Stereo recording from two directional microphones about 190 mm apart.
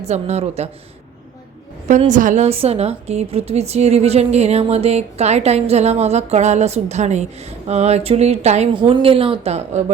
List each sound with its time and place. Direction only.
0.0 s a woman's voice: 35° right (ahead or behind)
1.9 s a woman's voice: 40° right (ahead or behind)